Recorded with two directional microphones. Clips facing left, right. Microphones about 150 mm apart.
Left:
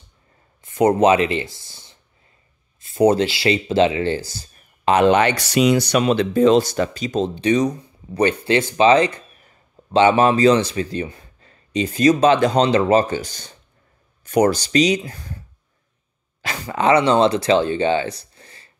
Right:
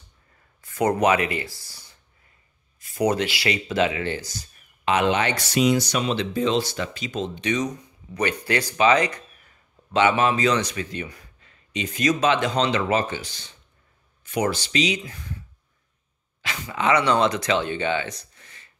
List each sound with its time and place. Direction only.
0.6 s speech: 25° left (ahead or behind); by 5.2 s 40° left (ahead or behind)
5.2 s speech: 75° left (ahead or behind); by 15.4 s 40° left (ahead or behind)
16.4 s speech: 35° left (ahead or behind)